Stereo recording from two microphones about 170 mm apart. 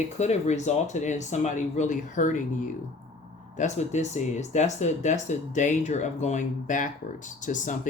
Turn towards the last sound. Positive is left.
turn(degrees=50)  # may be behind; listen again after turning